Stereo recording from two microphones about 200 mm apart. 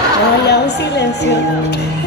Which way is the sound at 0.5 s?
55° left (ahead or behind).